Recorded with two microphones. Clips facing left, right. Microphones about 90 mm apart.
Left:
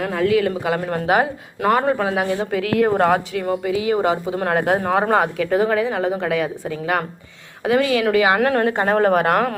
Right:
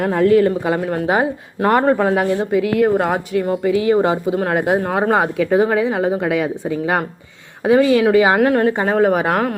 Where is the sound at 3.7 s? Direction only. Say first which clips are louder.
Right 6 dB; 40° right (ahead or behind).